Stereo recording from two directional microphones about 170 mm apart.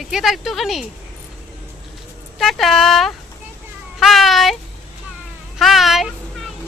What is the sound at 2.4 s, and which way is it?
Speech, centre (ahead or behind).